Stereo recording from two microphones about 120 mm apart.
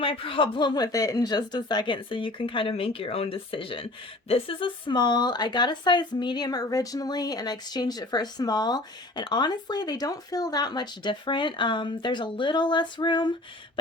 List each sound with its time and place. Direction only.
0.0 s speech: 50° left (ahead or behind)